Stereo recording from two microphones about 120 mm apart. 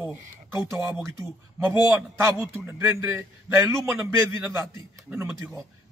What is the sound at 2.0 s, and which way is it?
A man's voice, 20° right (ahead or behind).